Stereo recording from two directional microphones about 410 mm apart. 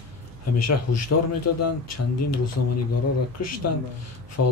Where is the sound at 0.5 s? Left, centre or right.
Left.